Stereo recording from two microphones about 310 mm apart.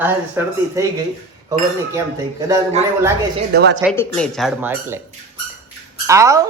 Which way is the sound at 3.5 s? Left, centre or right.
Right.